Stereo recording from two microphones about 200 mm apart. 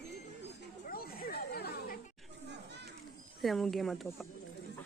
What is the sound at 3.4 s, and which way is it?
Speech, centre (ahead or behind).